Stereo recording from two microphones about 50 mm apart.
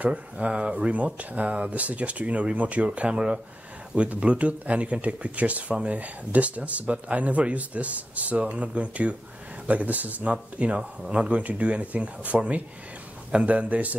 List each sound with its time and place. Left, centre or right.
0.0 s speech: right
10.3 s speech: right